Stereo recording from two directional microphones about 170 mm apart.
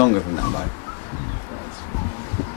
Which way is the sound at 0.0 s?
25° left (ahead or behind).